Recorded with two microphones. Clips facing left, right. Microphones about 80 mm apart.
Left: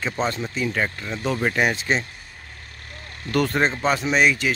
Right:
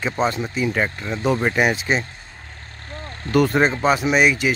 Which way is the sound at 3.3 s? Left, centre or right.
Centre.